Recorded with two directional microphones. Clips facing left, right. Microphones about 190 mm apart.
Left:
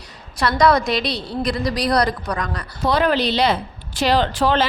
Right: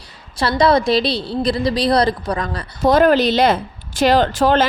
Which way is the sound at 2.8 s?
45° right (ahead or behind).